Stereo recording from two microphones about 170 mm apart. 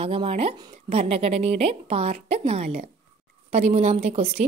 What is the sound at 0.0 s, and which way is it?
Speech, 35° right (ahead or behind).